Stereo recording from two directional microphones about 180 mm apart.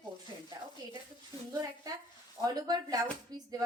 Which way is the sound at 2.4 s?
20° right (ahead or behind).